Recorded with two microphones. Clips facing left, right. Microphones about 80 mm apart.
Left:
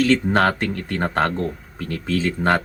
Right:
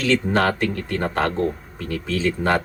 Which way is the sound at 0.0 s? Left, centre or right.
Left.